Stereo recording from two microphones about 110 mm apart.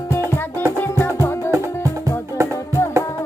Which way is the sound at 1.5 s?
30° right (ahead or behind).